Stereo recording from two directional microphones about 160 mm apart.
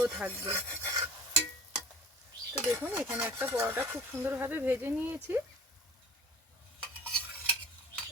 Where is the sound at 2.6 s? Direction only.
15° right (ahead or behind).